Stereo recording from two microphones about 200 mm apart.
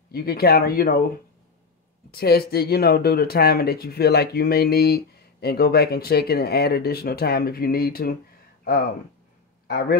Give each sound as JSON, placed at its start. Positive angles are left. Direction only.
{"t": 0.1, "sound": "speech", "side_deg": 50}
{"t": 2.0, "sound": "speech", "side_deg": 50}
{"t": 9.7, "sound": "speech", "side_deg": 50}